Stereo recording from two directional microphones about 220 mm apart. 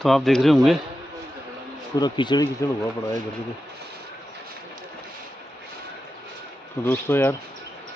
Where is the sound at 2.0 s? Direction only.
20° left (ahead or behind).